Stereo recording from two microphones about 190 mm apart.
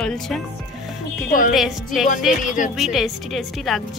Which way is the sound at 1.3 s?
45° left (ahead or behind).